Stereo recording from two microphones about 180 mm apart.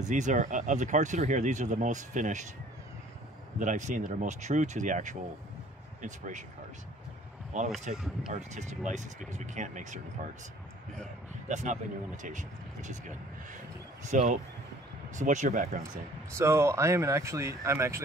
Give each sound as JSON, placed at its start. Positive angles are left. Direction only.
{"t": 0.0, "sound": "speech", "side_deg": -45}
{"t": 3.5, "sound": "speech", "side_deg": -45}
{"t": 7.5, "sound": "speech", "side_deg": -40}
{"t": 7.9, "sound": "speech", "side_deg": -5}
{"t": 8.3, "sound": "speech", "side_deg": -40}
{"t": 11.4, "sound": "speech", "side_deg": -40}
{"t": 16.3, "sound": "speech", "side_deg": -15}